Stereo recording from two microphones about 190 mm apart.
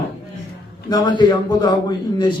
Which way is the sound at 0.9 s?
20° left (ahead or behind).